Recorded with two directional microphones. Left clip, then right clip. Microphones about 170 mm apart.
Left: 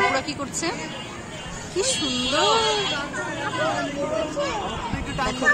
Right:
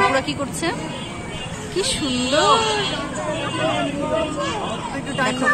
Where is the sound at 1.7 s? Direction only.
10° left (ahead or behind).